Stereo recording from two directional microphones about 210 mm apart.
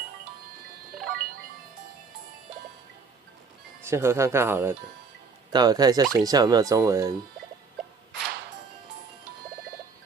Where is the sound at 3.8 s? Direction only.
10° right (ahead or behind).